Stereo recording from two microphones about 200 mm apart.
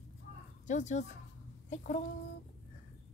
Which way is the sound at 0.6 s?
35° left (ahead or behind).